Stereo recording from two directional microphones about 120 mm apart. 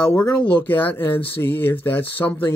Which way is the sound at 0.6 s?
15° left (ahead or behind).